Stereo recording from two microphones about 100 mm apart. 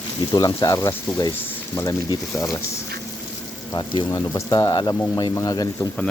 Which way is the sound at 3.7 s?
50° left (ahead or behind).